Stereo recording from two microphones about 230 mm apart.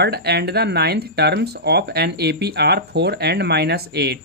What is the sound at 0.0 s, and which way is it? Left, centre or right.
Speech, right.